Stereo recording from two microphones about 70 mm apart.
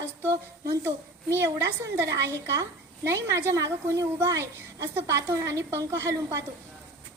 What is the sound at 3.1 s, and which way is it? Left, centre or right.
A woman's voice, right.